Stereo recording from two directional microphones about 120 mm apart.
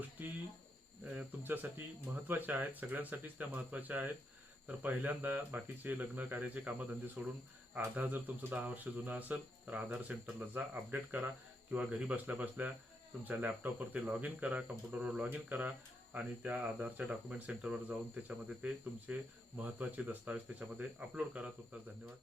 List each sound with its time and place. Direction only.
1.1 s speech: 15° right (ahead or behind)